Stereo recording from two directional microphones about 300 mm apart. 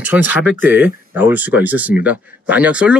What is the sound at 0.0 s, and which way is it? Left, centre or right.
Speech, centre.